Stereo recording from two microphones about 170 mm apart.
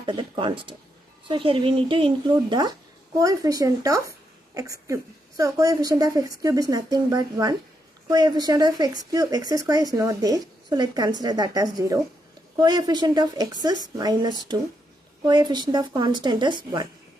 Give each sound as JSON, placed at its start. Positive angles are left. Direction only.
{"t": 0.0, "sound": "a woman's voice", "side_deg": -30}